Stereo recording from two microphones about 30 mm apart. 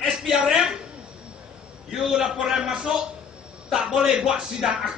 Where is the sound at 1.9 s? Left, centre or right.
Centre.